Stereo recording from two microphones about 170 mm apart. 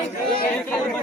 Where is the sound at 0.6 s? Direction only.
5° left (ahead or behind).